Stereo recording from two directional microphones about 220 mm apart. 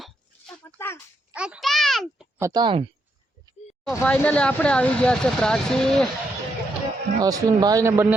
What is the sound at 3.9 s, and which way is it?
Speech, 5° left (ahead or behind).